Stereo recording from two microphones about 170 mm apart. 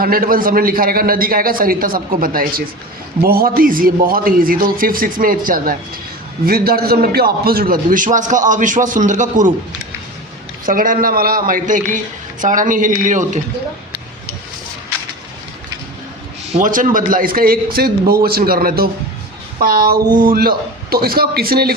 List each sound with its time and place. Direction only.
0.0 s a man's voice: 60° right (ahead or behind)
10.7 s a man's voice: 55° right (ahead or behind)
16.6 s a man's voice: 50° right (ahead or behind)